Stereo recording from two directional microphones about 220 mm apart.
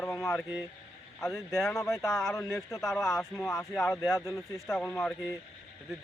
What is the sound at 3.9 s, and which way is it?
Speech, 15° left (ahead or behind).